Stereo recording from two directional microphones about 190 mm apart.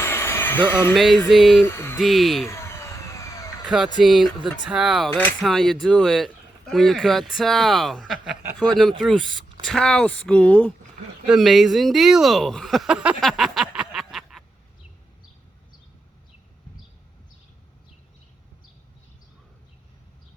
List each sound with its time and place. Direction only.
0.0 s a sound: 15° left (ahead or behind)
0.9 s speech: centre (ahead or behind)
1.6 s a sound: 15° left (ahead or behind)
2.0 s speech: centre (ahead or behind)
2.5 s emergency vehicle: 15° left (ahead or behind)
4.0 s speech: centre (ahead or behind)